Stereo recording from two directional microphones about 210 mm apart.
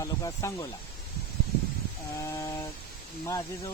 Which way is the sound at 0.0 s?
15° left (ahead or behind).